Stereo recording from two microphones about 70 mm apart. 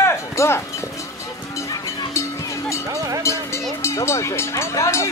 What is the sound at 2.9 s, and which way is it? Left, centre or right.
Vehicle, right.